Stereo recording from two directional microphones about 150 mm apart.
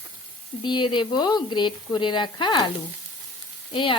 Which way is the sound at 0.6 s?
30° left (ahead or behind).